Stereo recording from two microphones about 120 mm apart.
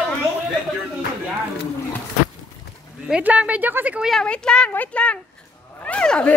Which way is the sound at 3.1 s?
10° right (ahead or behind).